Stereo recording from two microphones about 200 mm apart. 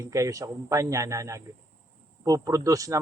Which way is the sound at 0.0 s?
15° right (ahead or behind).